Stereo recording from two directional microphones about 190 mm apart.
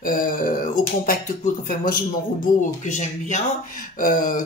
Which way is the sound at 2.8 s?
40° left (ahead or behind).